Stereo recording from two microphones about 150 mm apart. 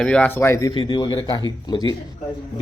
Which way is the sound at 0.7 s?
30° left (ahead or behind).